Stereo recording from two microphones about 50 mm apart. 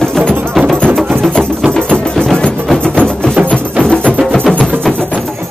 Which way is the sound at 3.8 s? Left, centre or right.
Right.